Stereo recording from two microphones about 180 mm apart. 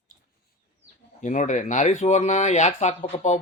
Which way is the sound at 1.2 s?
45° left (ahead or behind).